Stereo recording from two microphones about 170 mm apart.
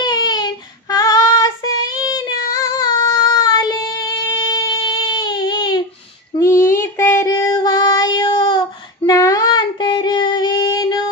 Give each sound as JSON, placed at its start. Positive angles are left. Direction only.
{"t": 0.0, "sound": "child singing", "side_deg": 25}
{"t": 4.4, "sound": "a sound", "side_deg": 20}
{"t": 6.4, "sound": "child singing", "side_deg": 15}